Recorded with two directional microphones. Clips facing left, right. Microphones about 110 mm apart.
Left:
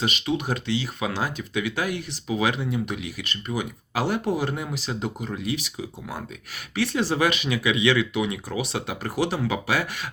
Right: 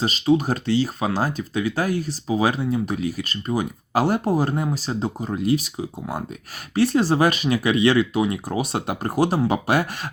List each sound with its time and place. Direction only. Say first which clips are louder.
0.0 s speech: right 7 dB; 35° right (ahead or behind); by 9.8 s 50° right (ahead or behind)